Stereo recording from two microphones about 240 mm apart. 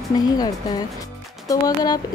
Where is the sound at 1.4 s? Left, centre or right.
Centre.